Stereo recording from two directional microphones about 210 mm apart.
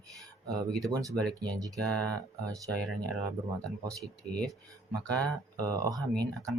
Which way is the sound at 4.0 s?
5° left (ahead or behind).